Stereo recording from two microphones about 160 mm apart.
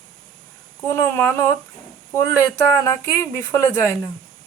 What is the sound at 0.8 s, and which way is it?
Speech, 15° left (ahead or behind).